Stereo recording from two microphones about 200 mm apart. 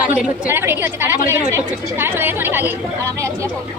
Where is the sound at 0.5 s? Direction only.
10° right (ahead or behind).